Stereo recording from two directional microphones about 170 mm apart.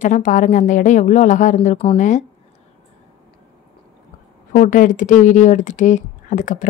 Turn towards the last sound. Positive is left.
turn(degrees=50)  # may be behind; listen again after turning